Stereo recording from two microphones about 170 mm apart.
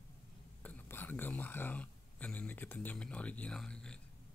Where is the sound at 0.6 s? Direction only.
10° left (ahead or behind).